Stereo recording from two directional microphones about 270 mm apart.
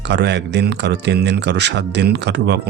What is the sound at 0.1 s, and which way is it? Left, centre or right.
Speech, right.